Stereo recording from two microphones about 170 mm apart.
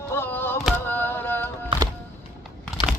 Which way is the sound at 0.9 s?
10° left (ahead or behind).